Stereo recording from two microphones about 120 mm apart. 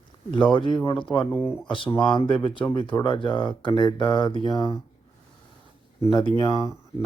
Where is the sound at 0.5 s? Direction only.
40° left (ahead or behind).